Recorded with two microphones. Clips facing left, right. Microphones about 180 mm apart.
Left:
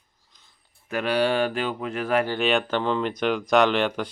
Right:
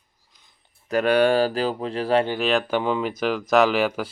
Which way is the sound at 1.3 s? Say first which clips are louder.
Right 3 dB; 35° right (ahead or behind).